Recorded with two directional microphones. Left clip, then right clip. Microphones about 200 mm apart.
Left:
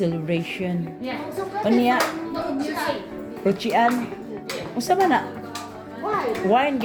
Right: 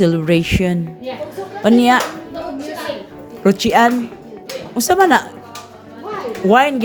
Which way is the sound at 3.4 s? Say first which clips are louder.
Right 7 dB; 45° right (ahead or behind).